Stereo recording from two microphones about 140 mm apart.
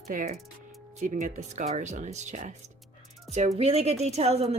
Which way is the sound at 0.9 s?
60° right (ahead or behind).